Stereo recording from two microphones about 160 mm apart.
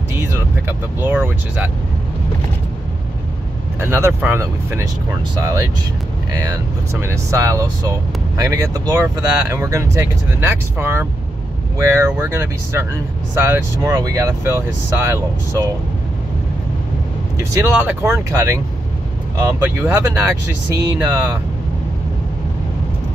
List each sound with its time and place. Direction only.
0.2 s speech: 15° right (ahead or behind)
3.8 s speech: 15° right (ahead or behind)
17.4 s speech: 15° right (ahead or behind)